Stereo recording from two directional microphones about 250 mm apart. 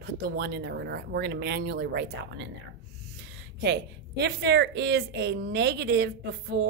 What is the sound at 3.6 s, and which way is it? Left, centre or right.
A woman's voice, right.